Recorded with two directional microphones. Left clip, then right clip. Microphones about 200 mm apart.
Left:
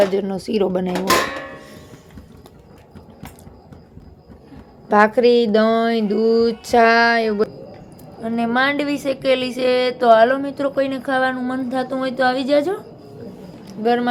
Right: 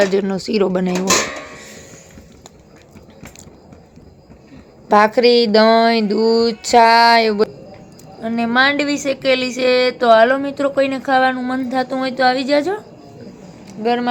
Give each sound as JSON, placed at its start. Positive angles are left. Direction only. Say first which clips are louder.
{"t": 0.0, "sound": "speech", "louder": "right 2 dB", "side_deg": -10}
{"t": 4.9, "sound": "a woman's voice", "louder": "right 2 dB", "side_deg": -5}